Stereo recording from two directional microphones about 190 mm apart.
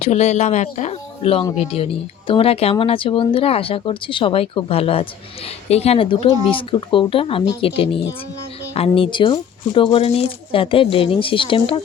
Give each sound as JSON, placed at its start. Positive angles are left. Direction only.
{"t": 0.0, "sound": "speech", "side_deg": 35}